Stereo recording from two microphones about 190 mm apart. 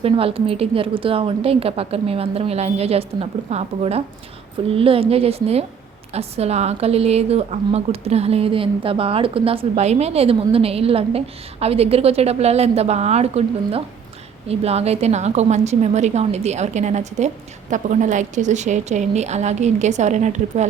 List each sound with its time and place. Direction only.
0.0 s a woman's voice: 30° right (ahead or behind)